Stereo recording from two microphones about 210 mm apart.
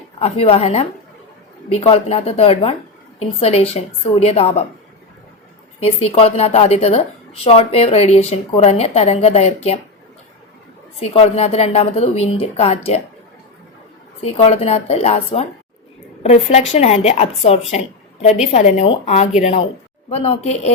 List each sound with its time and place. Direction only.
0.2 s a woman's voice: 30° left (ahead or behind)
5.8 s a woman's voice: 30° left (ahead or behind)
11.0 s a woman's voice: 30° left (ahead or behind)
14.2 s a woman's voice: 30° left (ahead or behind)